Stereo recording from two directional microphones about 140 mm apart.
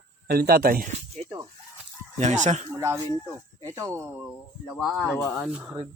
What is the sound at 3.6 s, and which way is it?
Speech, 20° right (ahead or behind).